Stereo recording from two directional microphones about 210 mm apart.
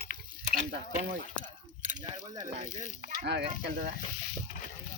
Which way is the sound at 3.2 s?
50° right (ahead or behind).